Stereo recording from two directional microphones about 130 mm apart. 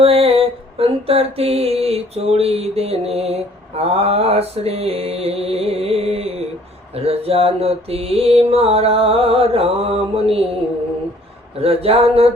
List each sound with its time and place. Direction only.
0.0 s mantra: 50° right (ahead or behind)
11.6 s mantra: 50° right (ahead or behind)